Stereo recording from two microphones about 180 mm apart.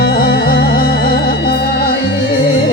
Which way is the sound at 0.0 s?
60° left (ahead or behind).